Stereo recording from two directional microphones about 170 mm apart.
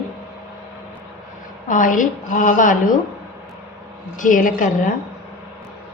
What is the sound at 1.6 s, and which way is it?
A woman's voice, 50° left (ahead or behind).